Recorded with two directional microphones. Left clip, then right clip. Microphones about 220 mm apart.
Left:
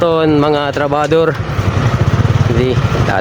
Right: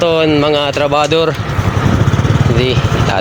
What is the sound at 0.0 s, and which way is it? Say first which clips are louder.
Speech: even; 20° left (ahead or behind).